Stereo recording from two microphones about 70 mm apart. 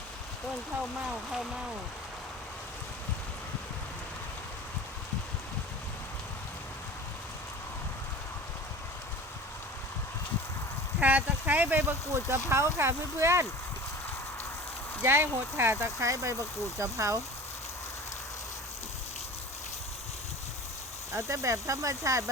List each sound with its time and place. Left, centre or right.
11.0 s speech: right
12.5 s speech: right
15.0 s speech: right
21.1 s speech: right